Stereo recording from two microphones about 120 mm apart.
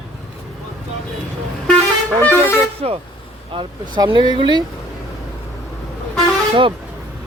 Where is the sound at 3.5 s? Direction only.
45° right (ahead or behind).